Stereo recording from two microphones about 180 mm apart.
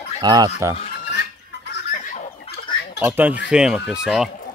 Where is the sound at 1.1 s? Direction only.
70° left (ahead or behind).